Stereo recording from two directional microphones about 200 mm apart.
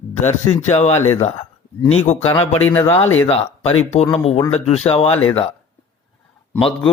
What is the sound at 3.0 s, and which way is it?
Speech, 90° left.